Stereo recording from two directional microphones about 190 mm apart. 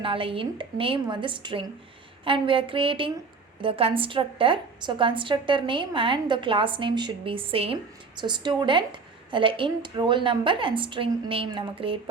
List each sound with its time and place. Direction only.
0.0 s a woman's voice: 30° right (ahead or behind)